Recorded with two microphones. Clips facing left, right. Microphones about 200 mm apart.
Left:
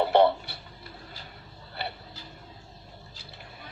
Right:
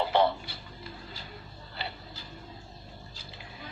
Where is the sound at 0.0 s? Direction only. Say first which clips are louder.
Left 5 dB; 60° left (ahead or behind).